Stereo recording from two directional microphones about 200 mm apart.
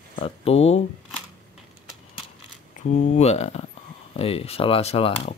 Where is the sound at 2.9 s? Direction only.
35° left (ahead or behind).